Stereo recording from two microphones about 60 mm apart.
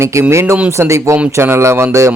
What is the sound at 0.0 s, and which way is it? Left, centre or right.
Speech, right.